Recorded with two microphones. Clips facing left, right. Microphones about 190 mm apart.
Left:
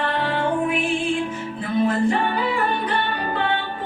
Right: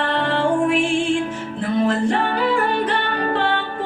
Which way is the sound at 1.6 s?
75° right (ahead or behind).